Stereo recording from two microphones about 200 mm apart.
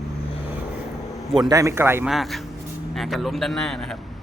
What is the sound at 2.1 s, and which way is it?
Speech, centre (ahead or behind).